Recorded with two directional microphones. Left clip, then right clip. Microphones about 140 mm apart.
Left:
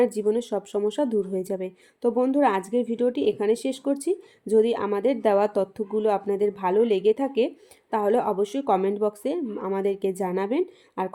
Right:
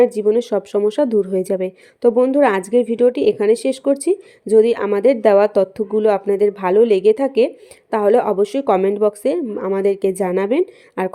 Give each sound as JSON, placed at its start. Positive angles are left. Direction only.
{"t": 0.0, "sound": "speech", "side_deg": -15}
{"t": 0.5, "sound": "a woman's voice", "side_deg": -25}